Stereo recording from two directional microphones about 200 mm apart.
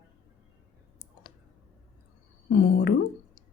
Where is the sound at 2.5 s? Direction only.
50° left (ahead or behind).